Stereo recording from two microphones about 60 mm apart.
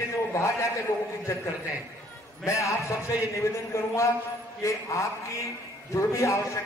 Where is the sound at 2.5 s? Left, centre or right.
Left.